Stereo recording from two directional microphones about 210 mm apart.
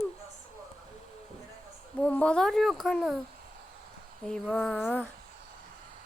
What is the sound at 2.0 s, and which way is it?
A child's voice, 5° left (ahead or behind).